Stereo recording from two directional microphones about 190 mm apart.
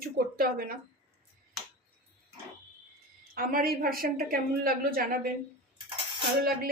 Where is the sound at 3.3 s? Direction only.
50° right (ahead or behind).